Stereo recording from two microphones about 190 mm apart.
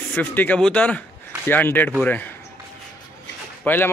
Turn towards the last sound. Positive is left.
turn(degrees=10)  # may be behind; listen again after turning